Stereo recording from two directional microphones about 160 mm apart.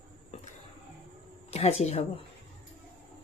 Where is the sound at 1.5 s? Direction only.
40° left (ahead or behind).